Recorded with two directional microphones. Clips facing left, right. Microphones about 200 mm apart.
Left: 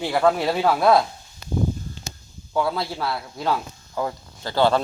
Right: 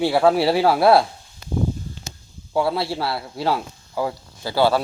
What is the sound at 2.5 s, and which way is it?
Speech, 30° right (ahead or behind).